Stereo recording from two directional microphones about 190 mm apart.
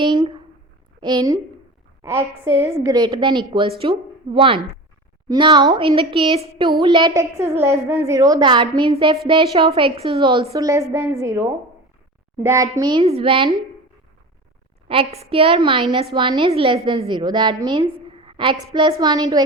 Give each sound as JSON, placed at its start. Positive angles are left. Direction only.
{"t": 0.0, "sound": "a woman's voice", "side_deg": -25}
{"t": 14.8, "sound": "a woman's voice", "side_deg": -30}